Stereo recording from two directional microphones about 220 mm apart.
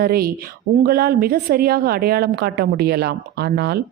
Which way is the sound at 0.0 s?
45° right (ahead or behind).